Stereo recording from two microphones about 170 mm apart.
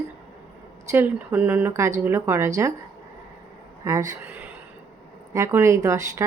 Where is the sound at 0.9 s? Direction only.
15° right (ahead or behind).